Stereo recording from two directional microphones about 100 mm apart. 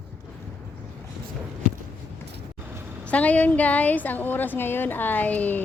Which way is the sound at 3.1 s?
15° left (ahead or behind).